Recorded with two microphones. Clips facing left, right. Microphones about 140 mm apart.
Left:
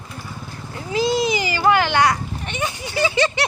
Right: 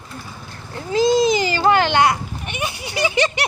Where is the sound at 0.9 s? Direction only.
40° right (ahead or behind).